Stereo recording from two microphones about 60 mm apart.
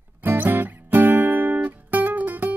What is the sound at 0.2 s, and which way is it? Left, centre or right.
Music, right.